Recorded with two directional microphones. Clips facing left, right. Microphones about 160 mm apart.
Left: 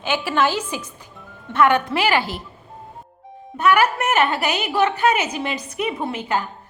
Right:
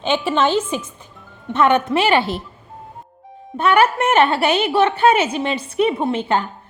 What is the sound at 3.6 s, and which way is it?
A woman's voice, 25° right (ahead or behind).